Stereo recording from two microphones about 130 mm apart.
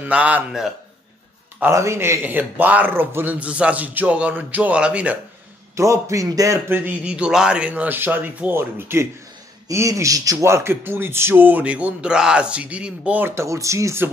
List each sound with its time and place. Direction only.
0.0 s speech: 10° right (ahead or behind)
1.6 s speech: 20° right (ahead or behind)
5.8 s speech: 25° right (ahead or behind)